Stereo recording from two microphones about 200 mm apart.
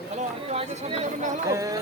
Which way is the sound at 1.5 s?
15° right (ahead or behind).